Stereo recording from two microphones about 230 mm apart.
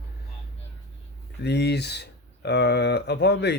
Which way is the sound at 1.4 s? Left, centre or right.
Left.